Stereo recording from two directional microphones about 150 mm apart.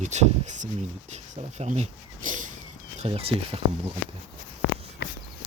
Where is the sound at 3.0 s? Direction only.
40° right (ahead or behind).